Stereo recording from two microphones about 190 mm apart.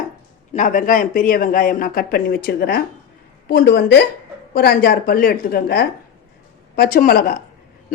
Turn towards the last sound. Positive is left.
turn(degrees=50)  # may be behind; listen again after turning